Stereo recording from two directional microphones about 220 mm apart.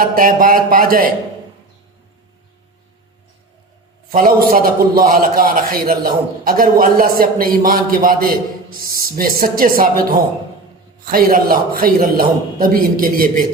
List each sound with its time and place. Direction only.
0.0 s a man's voice: 40° right (ahead or behind)
4.1 s a man's voice: 40° right (ahead or behind)
11.0 s a man's voice: 40° right (ahead or behind)